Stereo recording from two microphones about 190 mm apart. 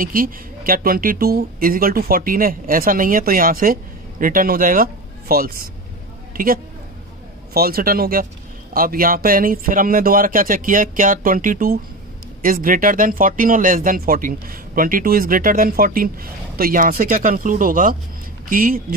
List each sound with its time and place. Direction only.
0.0 s a man's voice: 50° right (ahead or behind)